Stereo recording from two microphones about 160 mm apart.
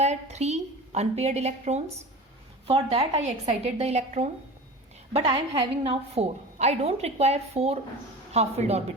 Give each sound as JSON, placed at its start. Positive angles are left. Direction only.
{"t": 0.0, "sound": "a woman's voice", "side_deg": -45}
{"t": 5.2, "sound": "a woman's voice", "side_deg": -30}